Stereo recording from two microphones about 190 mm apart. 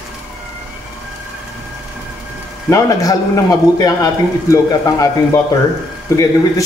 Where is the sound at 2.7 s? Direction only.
20° left (ahead or behind).